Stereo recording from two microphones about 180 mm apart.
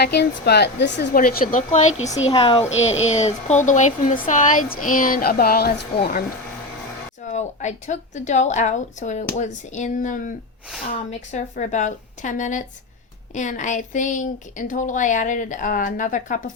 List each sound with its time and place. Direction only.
0.0 s a woman's voice: 65° left (ahead or behind)
1.1 s a woman's voice: 55° left (ahead or behind)
2.3 s a woman's voice: 30° left (ahead or behind); by 6.2 s 60° left (ahead or behind)
7.3 s a woman's voice: 40° left (ahead or behind)